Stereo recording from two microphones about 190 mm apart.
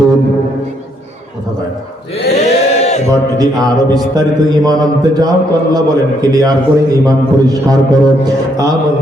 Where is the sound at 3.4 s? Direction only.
20° right (ahead or behind).